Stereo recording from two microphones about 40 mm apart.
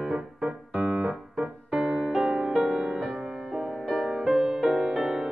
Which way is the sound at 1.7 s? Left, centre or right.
Centre.